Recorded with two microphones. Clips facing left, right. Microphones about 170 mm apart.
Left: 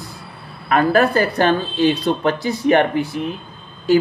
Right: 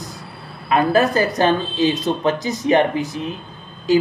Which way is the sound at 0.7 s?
20° right (ahead or behind).